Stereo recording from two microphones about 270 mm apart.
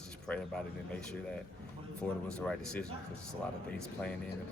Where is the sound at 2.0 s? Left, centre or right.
Centre.